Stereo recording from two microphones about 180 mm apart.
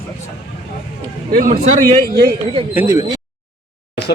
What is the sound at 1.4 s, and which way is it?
Speech, 40° right (ahead or behind).